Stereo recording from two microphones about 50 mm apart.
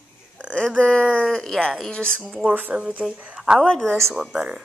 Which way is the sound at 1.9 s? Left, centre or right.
Centre.